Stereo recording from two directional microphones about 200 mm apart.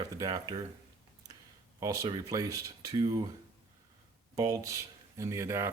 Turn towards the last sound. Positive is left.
turn(degrees=-15)  # may be behind; listen again after turning